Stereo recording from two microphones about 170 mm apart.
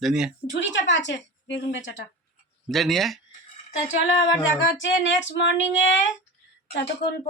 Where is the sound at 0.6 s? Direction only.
90° left.